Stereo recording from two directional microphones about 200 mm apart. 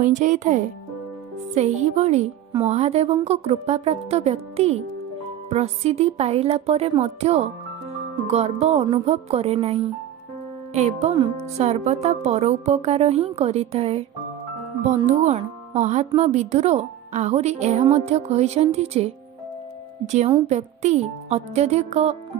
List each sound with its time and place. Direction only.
0.0 s speech: 35° right (ahead or behind)
15.0 s speech: 35° right (ahead or behind)